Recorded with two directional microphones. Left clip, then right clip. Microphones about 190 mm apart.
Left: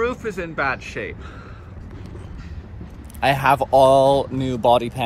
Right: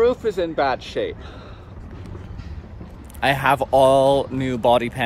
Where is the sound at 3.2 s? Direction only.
10° right (ahead or behind).